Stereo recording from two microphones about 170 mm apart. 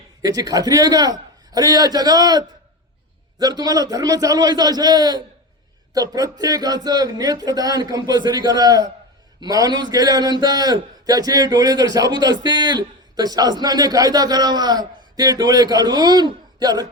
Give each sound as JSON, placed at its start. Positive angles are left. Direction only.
{"t": 0.2, "sound": "a man's voice", "side_deg": -20}